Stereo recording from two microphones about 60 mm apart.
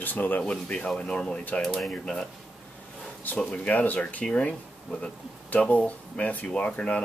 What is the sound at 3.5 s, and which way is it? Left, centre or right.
Speech, left.